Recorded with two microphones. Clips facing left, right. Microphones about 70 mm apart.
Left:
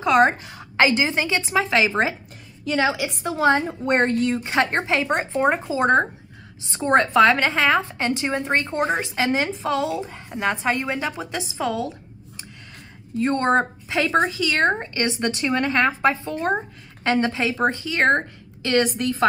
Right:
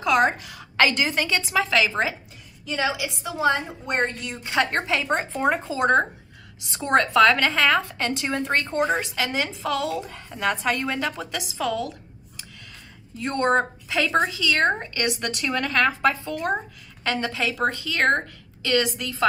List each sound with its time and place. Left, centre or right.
0.0 s a woman's voice: left
2.6 s a woman's voice: left
4.5 s a woman's voice: left
13.2 s a woman's voice: left